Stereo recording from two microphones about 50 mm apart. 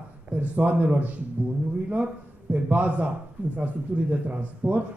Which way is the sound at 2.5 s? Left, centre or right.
Right.